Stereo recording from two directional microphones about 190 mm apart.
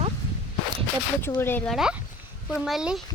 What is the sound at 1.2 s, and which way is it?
Speech, 10° left (ahead or behind).